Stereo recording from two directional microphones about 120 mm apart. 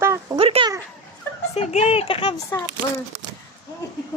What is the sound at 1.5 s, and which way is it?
Speech, 65° left (ahead or behind).